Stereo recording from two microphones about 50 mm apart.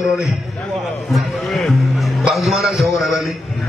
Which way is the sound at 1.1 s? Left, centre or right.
Centre.